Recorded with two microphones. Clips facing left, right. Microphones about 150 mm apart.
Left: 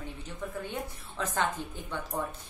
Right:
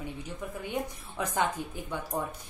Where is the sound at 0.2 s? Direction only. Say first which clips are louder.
Even; 10° right (ahead or behind).